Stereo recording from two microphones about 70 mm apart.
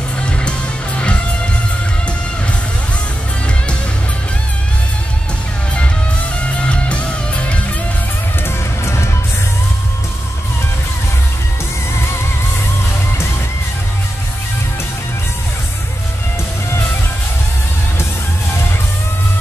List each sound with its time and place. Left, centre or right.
0.2 s music: centre
6.6 s music: centre
8.5 s music: left